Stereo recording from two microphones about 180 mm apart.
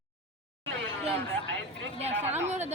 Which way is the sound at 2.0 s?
35° right (ahead or behind).